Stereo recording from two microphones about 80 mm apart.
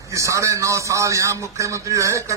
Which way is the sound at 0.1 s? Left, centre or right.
Right.